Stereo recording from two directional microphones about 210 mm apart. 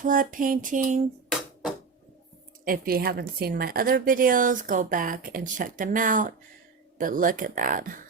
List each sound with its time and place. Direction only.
0.0 s a woman's voice: 40° right (ahead or behind)
2.6 s a woman's voice: 45° right (ahead or behind)